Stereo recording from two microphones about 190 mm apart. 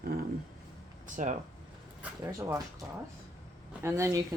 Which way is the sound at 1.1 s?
40° right (ahead or behind).